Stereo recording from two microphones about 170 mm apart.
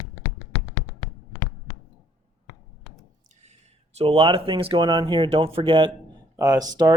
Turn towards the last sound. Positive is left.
turn(degrees=-20)  # may be behind; listen again after turning